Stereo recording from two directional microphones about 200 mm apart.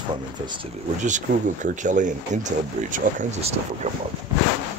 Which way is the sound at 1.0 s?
40° right (ahead or behind).